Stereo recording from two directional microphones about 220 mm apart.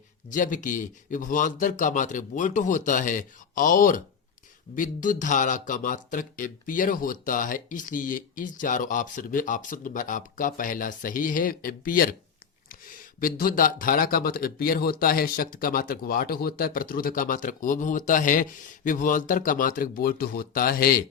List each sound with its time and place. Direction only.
0.3 s speech: 35° left (ahead or behind)
13.1 s speech: 40° left (ahead or behind)